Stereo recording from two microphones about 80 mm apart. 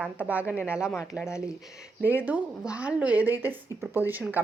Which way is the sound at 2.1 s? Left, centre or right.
Right.